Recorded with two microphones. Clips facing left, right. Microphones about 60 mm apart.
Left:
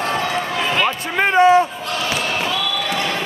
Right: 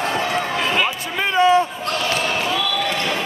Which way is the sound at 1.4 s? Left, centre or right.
Left.